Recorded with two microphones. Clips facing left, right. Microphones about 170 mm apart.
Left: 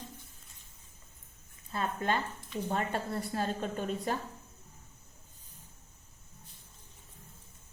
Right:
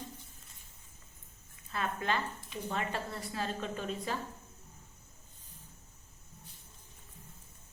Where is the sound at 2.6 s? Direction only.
40° left (ahead or behind).